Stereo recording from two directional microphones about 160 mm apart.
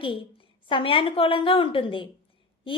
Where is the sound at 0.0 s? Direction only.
35° left (ahead or behind).